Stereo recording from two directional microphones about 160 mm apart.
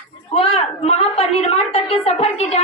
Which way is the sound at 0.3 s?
40° left (ahead or behind).